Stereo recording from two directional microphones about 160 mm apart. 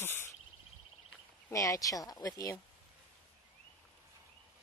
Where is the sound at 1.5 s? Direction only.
20° left (ahead or behind).